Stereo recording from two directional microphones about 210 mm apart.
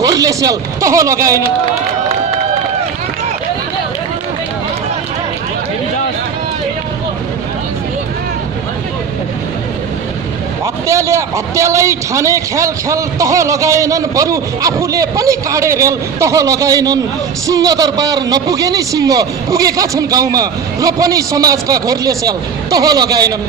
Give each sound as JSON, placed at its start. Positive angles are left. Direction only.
{"t": 0.0, "sound": "a man's voice", "side_deg": -15}
{"t": 10.8, "sound": "a man's voice", "side_deg": -15}